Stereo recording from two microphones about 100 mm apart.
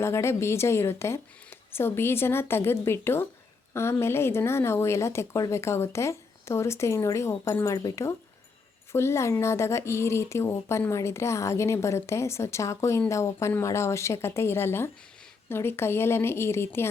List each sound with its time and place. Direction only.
0.0 s speech: 25° left (ahead or behind)